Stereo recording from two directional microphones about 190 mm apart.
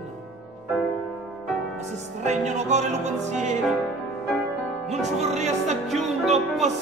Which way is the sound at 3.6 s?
Centre (ahead or behind).